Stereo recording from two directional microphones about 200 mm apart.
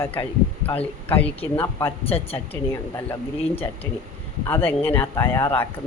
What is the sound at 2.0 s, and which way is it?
Speech, 30° left (ahead or behind).